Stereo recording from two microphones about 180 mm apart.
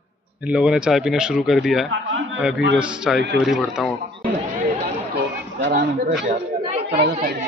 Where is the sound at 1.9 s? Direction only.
90° right.